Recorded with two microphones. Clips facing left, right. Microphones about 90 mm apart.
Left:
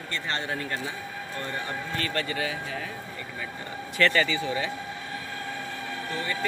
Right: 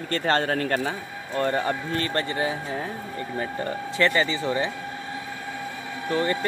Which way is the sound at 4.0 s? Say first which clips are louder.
Right 1 dB; 20° right (ahead or behind).